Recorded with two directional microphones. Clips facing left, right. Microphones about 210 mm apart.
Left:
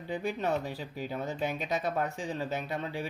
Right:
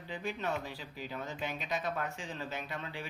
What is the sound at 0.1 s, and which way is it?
A man's voice, 40° left (ahead or behind).